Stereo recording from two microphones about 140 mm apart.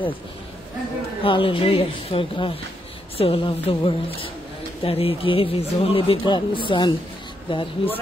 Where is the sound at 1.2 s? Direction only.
40° left (ahead or behind).